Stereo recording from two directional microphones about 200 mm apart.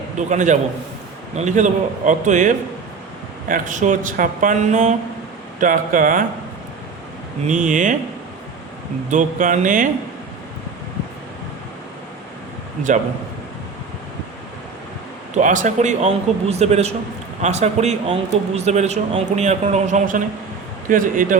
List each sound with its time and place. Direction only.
0.3 s a man's voice: 40° right (ahead or behind)
7.4 s a man's voice: 40° right (ahead or behind)
9.0 s a man's voice: 40° right (ahead or behind)
15.4 s a man's voice: 40° right (ahead or behind)